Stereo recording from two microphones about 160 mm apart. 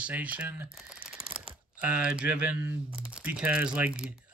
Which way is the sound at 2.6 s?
10° right (ahead or behind).